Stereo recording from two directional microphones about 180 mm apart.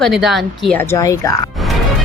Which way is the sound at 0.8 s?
15° left (ahead or behind).